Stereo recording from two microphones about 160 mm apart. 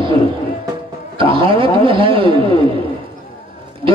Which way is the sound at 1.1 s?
35° right (ahead or behind).